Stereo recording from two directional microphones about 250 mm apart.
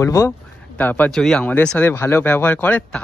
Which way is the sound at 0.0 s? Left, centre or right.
Centre.